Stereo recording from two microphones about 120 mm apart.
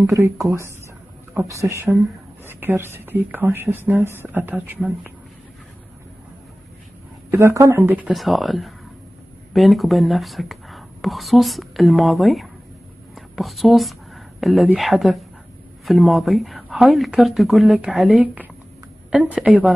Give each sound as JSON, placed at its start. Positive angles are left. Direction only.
{"t": 0.0, "sound": "a woman's voice", "side_deg": -25}
{"t": 7.2, "sound": "speech", "side_deg": -25}
{"t": 8.1, "sound": "speech", "side_deg": 0}
{"t": 13.1, "sound": "a sound", "side_deg": 0}
{"t": 14.8, "sound": "a woman's voice", "side_deg": 0}